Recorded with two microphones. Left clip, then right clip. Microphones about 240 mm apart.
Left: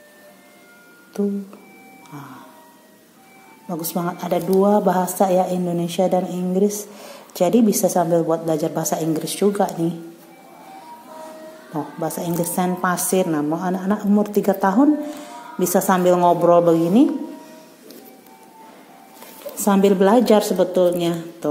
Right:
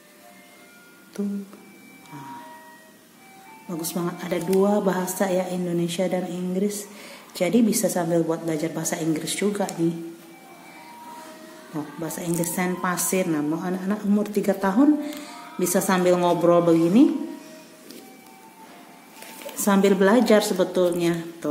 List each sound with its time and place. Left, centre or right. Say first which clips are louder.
3.6 s a woman's voice: left 4 dB; centre
9.5 s speech: left 9 dB; centre
11.7 s a woman's voice: left 6 dB; centre
19.2 s a woman's voice: left 3 dB; centre